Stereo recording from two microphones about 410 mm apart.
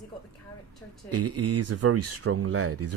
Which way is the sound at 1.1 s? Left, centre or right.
Right.